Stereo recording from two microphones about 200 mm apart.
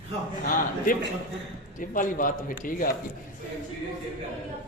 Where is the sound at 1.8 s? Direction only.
40° left (ahead or behind).